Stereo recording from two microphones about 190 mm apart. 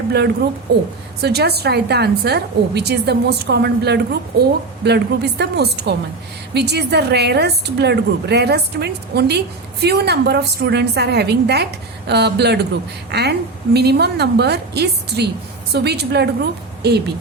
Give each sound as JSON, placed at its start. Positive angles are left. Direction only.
{"t": 0.7, "sound": "a woman's voice", "side_deg": -60}